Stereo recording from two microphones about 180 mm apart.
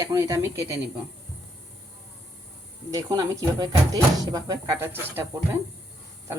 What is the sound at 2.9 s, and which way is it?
Speech, 20° right (ahead or behind).